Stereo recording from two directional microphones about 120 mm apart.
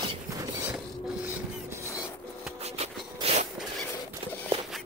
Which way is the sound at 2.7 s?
65° right (ahead or behind).